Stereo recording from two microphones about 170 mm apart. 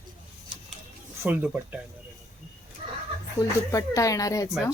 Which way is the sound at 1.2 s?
10° right (ahead or behind).